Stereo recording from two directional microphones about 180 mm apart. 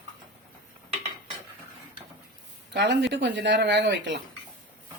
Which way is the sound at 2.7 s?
75° right (ahead or behind).